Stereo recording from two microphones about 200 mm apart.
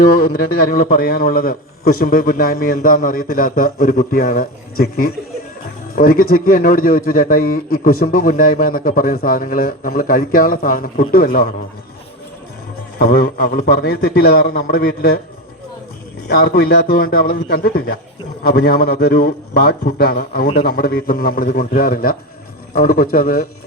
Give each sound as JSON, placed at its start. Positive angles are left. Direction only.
{"t": 0.9, "sound": "a man's voice", "side_deg": 45}
{"t": 13.1, "sound": "a man's voice", "side_deg": 50}
{"t": 16.3, "sound": "a man's voice", "side_deg": 50}